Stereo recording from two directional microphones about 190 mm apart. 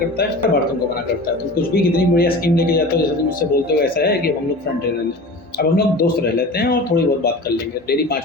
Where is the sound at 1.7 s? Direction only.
55° left (ahead or behind).